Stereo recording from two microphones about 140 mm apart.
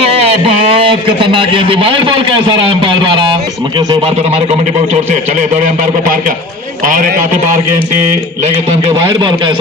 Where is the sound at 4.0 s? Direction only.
50° right (ahead or behind); by 7.4 s 70° right (ahead or behind).